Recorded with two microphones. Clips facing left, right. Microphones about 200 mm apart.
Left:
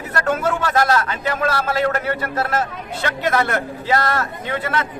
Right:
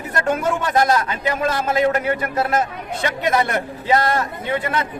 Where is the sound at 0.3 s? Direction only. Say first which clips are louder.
Right 1 dB; 15° right (ahead or behind).